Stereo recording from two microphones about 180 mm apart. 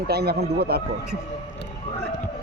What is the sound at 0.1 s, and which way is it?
Speech, 60° right (ahead or behind).